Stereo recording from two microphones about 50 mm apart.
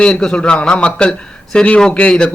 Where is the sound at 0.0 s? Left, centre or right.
Centre.